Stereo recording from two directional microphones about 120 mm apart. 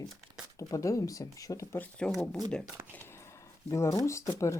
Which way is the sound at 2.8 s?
25° right (ahead or behind).